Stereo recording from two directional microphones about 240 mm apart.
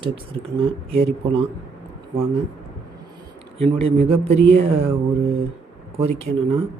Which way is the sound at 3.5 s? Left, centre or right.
Right.